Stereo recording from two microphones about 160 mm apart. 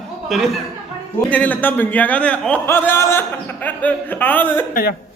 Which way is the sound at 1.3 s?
10° left (ahead or behind).